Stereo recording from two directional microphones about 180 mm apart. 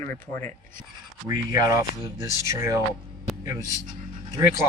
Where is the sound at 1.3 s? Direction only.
20° right (ahead or behind).